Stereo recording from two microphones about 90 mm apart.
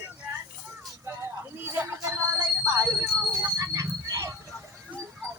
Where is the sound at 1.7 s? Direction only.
30° right (ahead or behind).